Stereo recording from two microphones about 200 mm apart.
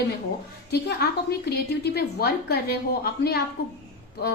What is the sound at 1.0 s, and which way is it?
A woman's voice, 50° left (ahead or behind).